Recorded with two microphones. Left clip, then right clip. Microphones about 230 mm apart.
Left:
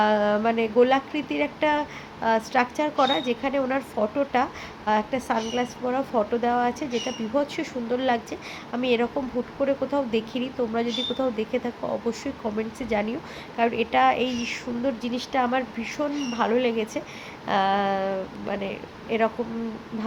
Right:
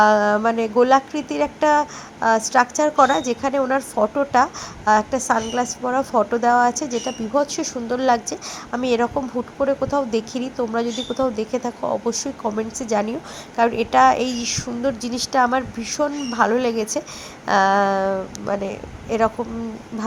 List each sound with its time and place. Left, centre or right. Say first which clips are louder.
0.0 s speech: right 6 dB; centre
7.9 s speech: right 6 dB; centre